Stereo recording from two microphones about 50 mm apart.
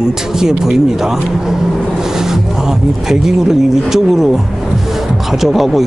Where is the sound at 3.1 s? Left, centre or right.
Centre.